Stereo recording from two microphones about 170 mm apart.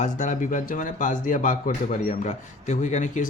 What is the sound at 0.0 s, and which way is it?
Speech, 50° left (ahead or behind).